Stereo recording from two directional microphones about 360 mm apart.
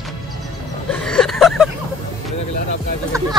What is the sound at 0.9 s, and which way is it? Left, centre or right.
Vehicle, centre.